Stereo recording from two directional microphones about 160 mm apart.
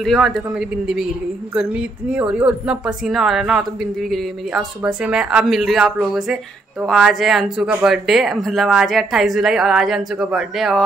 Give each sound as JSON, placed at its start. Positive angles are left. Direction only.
{"t": 0.0, "sound": "a woman's voice", "side_deg": 0}